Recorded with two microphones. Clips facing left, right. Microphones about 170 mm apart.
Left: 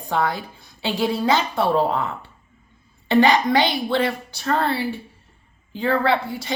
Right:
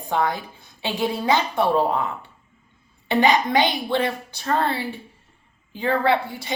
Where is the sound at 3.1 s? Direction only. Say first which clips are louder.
Left 2 dB; 20° right (ahead or behind).